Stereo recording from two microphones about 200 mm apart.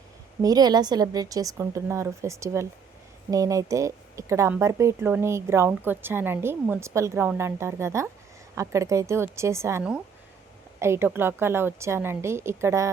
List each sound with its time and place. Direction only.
0.4 s speech: 20° right (ahead or behind)